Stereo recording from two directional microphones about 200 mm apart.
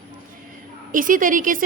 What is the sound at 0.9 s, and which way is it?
Speech, 40° right (ahead or behind).